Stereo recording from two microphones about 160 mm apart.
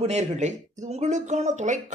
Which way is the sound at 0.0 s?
45° right (ahead or behind).